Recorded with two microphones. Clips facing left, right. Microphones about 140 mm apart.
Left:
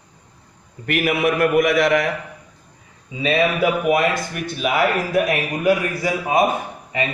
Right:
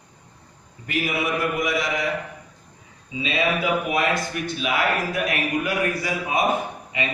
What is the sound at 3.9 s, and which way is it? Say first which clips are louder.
Speech: left 4 dB; 50° left (ahead or behind).